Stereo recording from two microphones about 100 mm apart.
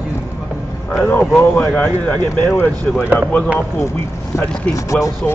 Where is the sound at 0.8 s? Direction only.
20° left (ahead or behind).